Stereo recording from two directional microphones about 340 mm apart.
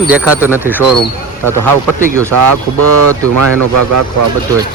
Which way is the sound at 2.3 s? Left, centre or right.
Right.